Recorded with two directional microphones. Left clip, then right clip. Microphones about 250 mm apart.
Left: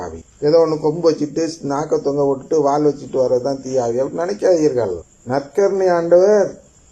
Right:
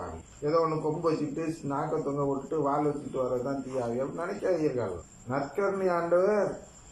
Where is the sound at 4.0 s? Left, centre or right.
Left.